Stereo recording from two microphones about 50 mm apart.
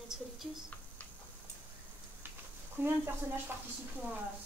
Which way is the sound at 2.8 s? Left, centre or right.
Right.